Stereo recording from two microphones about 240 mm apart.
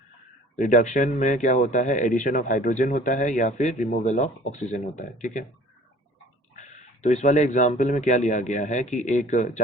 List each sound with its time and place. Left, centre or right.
0.5 s speech: left
6.6 s speech: left